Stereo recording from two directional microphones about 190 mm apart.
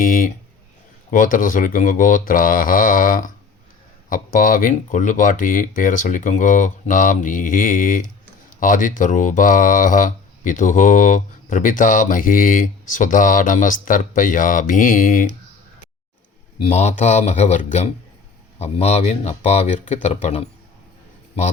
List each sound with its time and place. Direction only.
0.0 s speech: 45° left (ahead or behind)
16.6 s speech: 35° left (ahead or behind)